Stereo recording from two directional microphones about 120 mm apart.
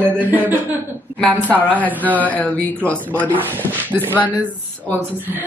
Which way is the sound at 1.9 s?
15° right (ahead or behind).